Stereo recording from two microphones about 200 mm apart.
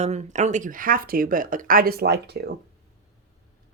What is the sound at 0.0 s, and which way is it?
Speech, 35° right (ahead or behind).